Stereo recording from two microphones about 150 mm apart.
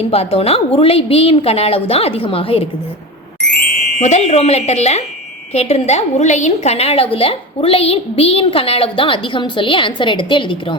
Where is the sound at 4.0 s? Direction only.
50° left (ahead or behind).